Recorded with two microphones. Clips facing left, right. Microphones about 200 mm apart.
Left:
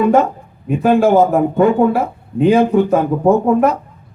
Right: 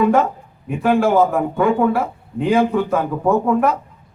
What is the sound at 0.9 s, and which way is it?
A man's voice, 20° left (ahead or behind).